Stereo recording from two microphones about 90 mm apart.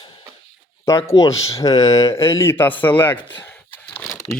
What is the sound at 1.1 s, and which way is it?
Speech, 35° left (ahead or behind).